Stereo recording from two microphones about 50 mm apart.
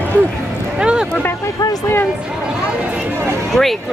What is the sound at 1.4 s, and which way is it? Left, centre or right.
Speech, left.